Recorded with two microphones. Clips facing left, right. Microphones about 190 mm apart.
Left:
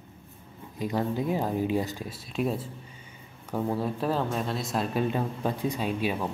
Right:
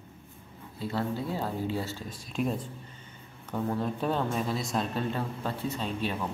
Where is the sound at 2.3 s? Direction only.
5° left (ahead or behind).